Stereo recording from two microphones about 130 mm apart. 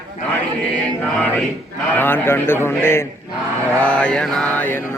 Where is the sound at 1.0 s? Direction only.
10° left (ahead or behind).